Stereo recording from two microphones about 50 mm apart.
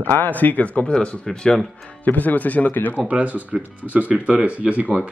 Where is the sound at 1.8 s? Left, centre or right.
Left.